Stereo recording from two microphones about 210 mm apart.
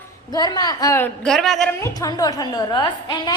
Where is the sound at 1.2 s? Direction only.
5° left (ahead or behind).